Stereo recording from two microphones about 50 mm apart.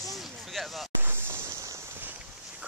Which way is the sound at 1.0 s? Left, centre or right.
Right.